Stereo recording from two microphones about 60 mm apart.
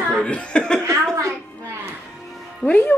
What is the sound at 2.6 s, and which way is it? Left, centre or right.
Speech, centre.